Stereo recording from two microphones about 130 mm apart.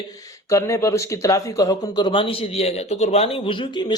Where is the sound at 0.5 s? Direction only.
20° left (ahead or behind).